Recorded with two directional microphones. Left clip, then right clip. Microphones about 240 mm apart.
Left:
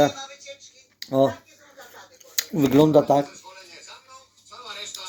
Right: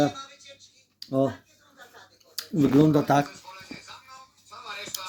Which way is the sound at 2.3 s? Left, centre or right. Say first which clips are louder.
Left 3 dB; centre.